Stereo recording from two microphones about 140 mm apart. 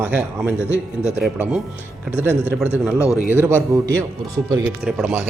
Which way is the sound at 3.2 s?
15° right (ahead or behind).